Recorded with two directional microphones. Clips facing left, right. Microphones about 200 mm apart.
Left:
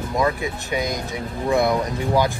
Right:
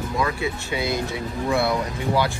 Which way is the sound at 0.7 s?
15° left (ahead or behind).